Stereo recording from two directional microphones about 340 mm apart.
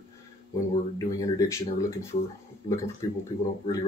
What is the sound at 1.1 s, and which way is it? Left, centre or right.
Speech, centre.